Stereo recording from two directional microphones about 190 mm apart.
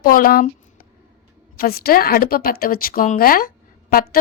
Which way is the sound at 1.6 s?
50° left (ahead or behind).